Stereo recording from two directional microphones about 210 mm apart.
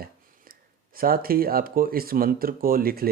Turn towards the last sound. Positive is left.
turn(degrees=-45)  # may be behind; listen again after turning